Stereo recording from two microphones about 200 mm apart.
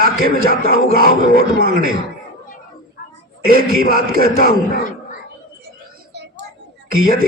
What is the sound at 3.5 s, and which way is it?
A man's voice, 45° right (ahead or behind).